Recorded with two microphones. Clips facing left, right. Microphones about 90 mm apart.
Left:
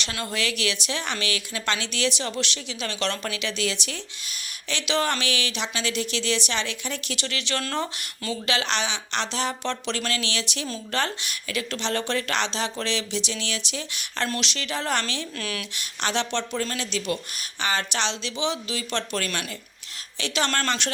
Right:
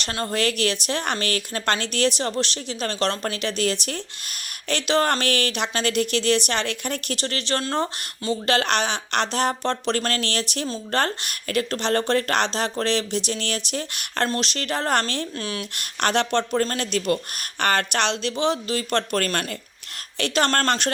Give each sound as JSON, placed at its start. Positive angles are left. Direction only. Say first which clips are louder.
{"t": 0.0, "sound": "speech", "louder": "right 5 dB", "side_deg": -40}
{"t": 7.6, "sound": "speech", "louder": "right 4 dB", "side_deg": -30}
{"t": 15.4, "sound": "speech", "louder": "right 2 dB", "side_deg": -30}
{"t": 15.7, "sound": "speech", "louder": "right 6 dB", "side_deg": -55}